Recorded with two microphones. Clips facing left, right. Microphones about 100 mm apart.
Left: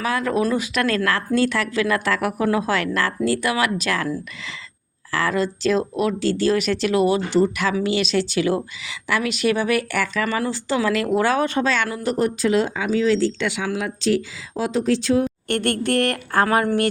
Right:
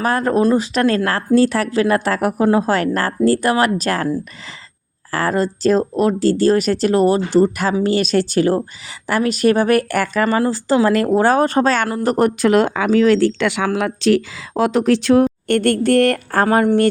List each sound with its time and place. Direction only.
0.0 s speech: 45° right (ahead or behind)
5.1 s speech: 40° right (ahead or behind)
12.0 s speech: 60° right (ahead or behind)
15.4 s speech: 40° right (ahead or behind)